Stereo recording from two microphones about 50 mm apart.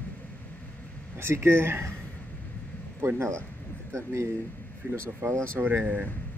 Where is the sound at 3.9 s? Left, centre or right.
Right.